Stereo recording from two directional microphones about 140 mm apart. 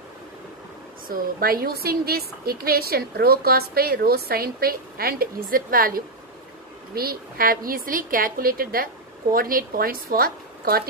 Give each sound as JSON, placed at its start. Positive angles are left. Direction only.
{"t": 1.0, "sound": "a woman's voice", "side_deg": -90}